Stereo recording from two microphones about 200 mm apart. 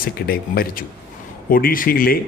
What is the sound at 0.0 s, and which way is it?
A man's voice, 50° left (ahead or behind).